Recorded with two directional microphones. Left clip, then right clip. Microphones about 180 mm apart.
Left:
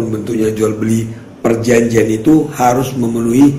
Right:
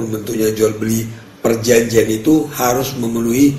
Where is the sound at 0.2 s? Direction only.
40° right (ahead or behind).